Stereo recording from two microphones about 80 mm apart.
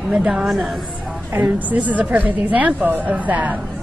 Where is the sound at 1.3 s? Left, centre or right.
Centre.